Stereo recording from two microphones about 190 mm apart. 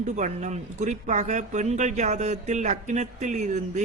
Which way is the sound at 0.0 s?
40° right (ahead or behind).